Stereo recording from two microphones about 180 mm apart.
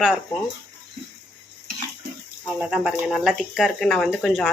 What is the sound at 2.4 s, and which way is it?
Speech, 5° right (ahead or behind).